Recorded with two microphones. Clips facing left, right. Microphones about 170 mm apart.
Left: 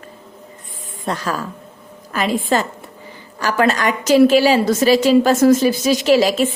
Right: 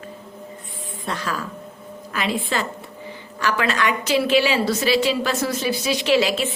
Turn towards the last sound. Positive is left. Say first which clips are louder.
# left 5 dB
turn(degrees=40)  # may be behind; listen again after turning